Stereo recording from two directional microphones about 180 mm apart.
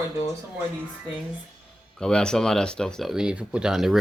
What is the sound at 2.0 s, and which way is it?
Speech, 5° left (ahead or behind).